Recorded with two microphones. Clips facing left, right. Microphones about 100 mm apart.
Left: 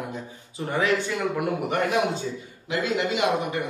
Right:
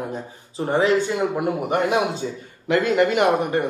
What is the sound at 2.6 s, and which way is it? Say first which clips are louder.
A man's voice: right 7 dB; 55° right (ahead or behind).